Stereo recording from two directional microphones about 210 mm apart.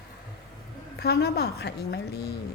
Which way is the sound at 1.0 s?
50° left (ahead or behind).